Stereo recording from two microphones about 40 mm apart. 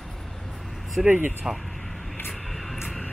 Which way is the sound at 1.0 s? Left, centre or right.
Centre.